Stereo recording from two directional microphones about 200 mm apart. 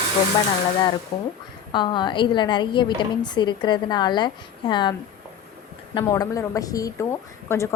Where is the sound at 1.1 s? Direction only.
25° left (ahead or behind).